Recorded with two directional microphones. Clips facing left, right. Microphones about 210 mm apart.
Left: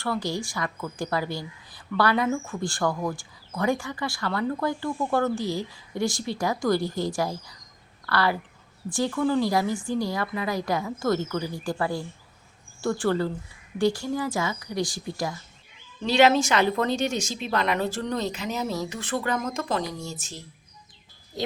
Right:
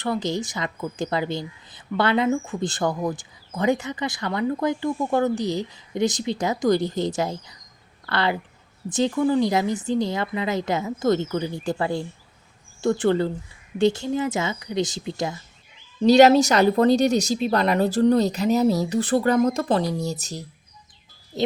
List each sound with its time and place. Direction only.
0.0 s a woman's voice: 20° right (ahead or behind)
16.0 s speech: 40° right (ahead or behind)